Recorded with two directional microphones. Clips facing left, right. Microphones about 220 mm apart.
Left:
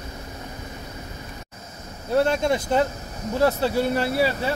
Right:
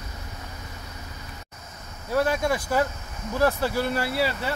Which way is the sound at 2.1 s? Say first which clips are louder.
Left 3 dB; 25° left (ahead or behind).